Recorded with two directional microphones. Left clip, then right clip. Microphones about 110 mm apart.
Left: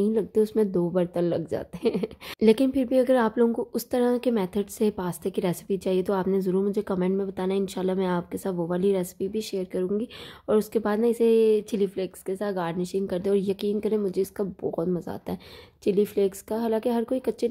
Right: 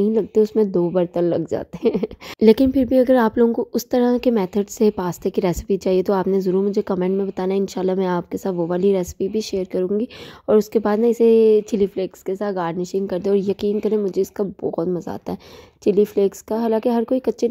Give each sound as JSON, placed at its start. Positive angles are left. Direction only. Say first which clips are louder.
{"t": 0.0, "sound": "speech", "louder": "right 6 dB", "side_deg": -35}
{"t": 6.2, "sound": "speech", "louder": "right 6 dB", "side_deg": -35}